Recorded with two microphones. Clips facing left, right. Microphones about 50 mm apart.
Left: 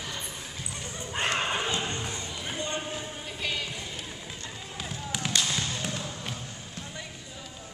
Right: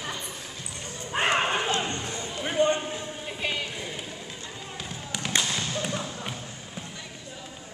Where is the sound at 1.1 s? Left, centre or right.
Centre.